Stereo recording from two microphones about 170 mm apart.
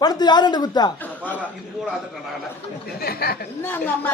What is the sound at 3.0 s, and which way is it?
Speech, 65° left (ahead or behind).